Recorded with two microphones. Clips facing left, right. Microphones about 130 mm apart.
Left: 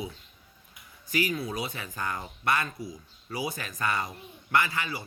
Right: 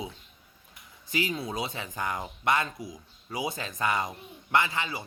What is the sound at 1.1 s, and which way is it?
Speech, 20° right (ahead or behind).